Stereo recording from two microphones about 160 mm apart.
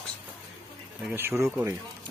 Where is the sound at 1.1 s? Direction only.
15° right (ahead or behind).